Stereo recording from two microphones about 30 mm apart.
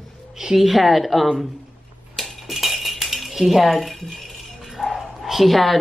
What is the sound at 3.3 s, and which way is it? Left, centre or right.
Speech, centre.